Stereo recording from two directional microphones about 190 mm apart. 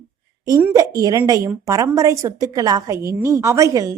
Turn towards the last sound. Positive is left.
turn(degrees=-15)  # may be behind; listen again after turning